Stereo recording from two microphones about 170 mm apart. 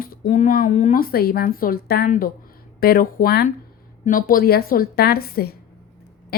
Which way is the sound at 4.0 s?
55° left (ahead or behind).